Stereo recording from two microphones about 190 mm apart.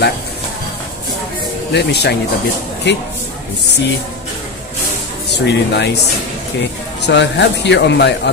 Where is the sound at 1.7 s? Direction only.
60° left (ahead or behind).